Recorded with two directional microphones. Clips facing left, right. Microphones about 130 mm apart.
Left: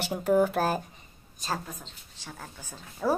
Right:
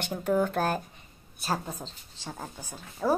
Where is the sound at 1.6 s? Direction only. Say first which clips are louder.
Right 4 dB; 30° right (ahead or behind).